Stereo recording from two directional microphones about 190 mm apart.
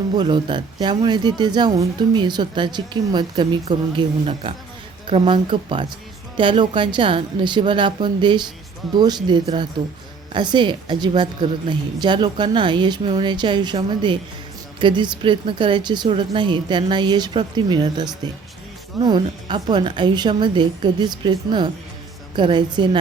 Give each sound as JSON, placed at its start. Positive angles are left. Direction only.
{"t": 0.2, "sound": "speech", "side_deg": -25}